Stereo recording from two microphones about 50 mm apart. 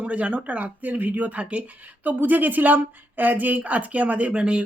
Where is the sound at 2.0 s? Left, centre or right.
Right.